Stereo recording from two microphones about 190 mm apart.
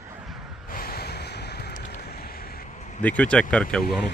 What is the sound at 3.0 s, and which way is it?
Speech, 5° left (ahead or behind).